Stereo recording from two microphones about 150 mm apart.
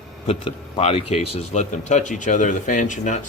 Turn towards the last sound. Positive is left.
turn(degrees=55)  # may be behind; listen again after turning